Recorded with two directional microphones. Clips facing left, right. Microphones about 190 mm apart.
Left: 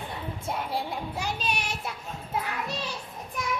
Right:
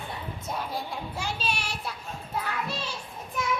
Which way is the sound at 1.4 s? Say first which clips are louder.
Left 1 dB; 20° left (ahead or behind).